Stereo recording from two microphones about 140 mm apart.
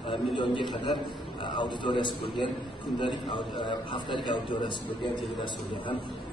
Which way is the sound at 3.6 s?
35° left (ahead or behind).